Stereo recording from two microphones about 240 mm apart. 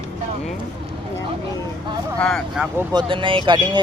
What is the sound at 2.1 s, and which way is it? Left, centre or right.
Vehicle, centre.